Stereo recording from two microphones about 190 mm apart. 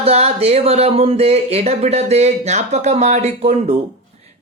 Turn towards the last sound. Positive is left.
turn(degrees=-35)  # may be behind; listen again after turning